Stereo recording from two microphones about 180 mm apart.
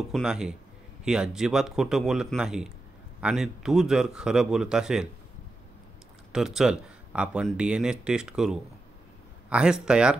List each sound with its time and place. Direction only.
0.1 s speech: 5° right (ahead or behind)
6.3 s speech: centre (ahead or behind)